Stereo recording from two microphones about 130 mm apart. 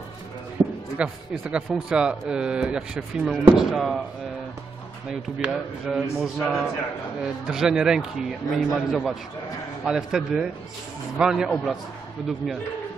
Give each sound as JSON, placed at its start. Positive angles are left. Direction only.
{"t": 0.6, "sound": "a sound", "side_deg": -30}
{"t": 0.9, "sound": "a man's voice", "side_deg": -5}
{"t": 5.4, "sound": "a man's voice", "side_deg": -5}